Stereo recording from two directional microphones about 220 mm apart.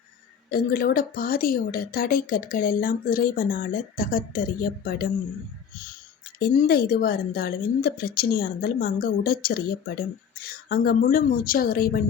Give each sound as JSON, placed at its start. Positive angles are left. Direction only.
{"t": 0.5, "sound": "a woman's voice", "side_deg": 40}
{"t": 6.4, "sound": "a woman's voice", "side_deg": 45}